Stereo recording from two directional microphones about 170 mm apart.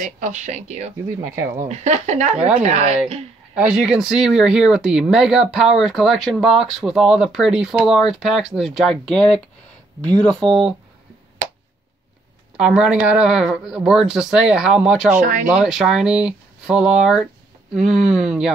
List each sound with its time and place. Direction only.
0.0 s speech: 45° right (ahead or behind)
2.3 s a woman's voice: 5° right (ahead or behind)
2.6 s speech: 40° right (ahead or behind)
3.5 s speech: 5° right (ahead or behind)
12.5 s speech: 5° right (ahead or behind)